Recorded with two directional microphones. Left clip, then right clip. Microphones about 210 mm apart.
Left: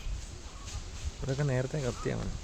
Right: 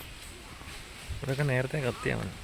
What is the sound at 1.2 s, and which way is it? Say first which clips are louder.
Speech: right 3 dB; centre (ahead or behind).